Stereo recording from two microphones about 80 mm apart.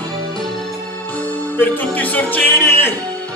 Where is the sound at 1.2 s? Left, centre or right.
Left.